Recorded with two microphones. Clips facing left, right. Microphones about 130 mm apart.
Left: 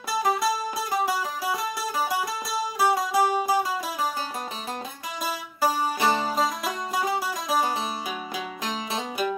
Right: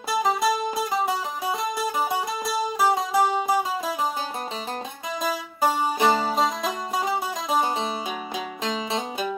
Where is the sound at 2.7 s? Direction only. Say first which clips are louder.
Even; 20° right (ahead or behind).